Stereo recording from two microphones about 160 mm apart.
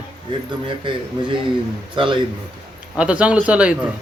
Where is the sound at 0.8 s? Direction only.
30° right (ahead or behind).